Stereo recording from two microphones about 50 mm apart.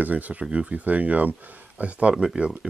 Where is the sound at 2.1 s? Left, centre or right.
Centre.